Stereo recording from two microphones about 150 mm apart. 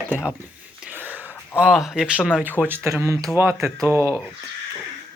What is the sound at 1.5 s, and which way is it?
Speech, 5° right (ahead or behind).